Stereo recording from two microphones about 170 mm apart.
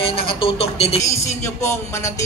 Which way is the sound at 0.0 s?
35° left (ahead or behind).